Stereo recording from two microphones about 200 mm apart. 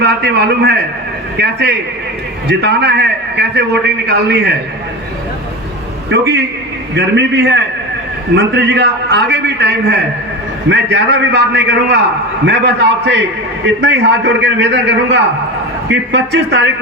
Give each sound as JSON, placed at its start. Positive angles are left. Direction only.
{"t": 0.0, "sound": "a man's voice", "side_deg": -55}
{"t": 6.1, "sound": "a man's voice", "side_deg": -55}